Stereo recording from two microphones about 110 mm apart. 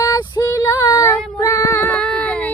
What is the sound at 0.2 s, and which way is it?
Female singing, 40° left (ahead or behind).